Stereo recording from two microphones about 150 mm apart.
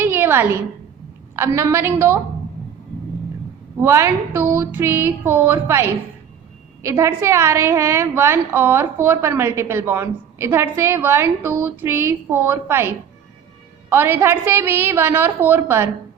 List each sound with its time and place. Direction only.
0.0 s a sound: 15° right (ahead or behind)
1.4 s a woman's voice: 15° right (ahead or behind)
3.8 s a woman's voice: 20° right (ahead or behind)
13.9 s a woman's voice: 15° right (ahead or behind)